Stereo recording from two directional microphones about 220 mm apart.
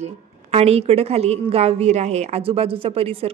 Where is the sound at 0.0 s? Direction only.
30° right (ahead or behind).